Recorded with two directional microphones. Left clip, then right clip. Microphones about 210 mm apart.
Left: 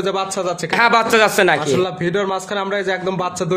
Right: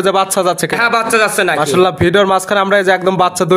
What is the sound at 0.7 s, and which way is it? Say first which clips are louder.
Speech: left 1 dB; 10° left (ahead or behind).